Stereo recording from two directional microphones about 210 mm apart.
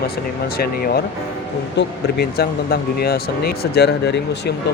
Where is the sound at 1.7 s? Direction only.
50° left (ahead or behind).